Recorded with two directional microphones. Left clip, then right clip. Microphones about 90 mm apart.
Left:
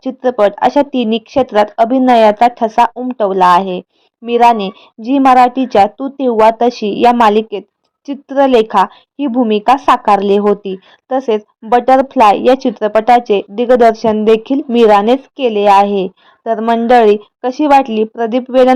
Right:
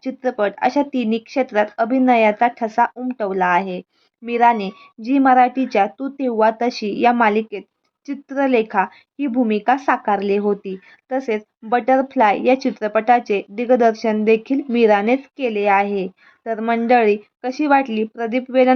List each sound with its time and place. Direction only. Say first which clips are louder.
0.0 s speech: left 9 dB; 45° left (ahead or behind)